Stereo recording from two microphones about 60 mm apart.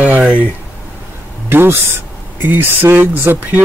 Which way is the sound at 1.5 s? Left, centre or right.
Right.